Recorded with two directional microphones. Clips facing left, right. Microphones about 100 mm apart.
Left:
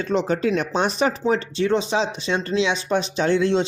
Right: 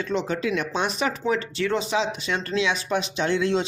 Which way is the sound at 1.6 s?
25° left (ahead or behind).